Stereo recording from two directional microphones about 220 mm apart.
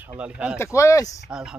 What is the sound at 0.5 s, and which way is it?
Speech, 10° left (ahead or behind).